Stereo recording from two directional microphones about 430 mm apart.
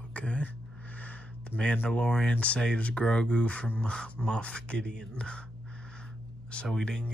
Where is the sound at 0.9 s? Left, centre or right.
Centre.